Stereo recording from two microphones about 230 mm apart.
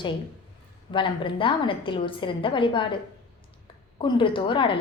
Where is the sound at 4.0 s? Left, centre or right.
Left.